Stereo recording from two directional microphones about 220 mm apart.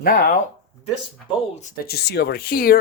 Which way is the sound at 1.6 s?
40° left (ahead or behind).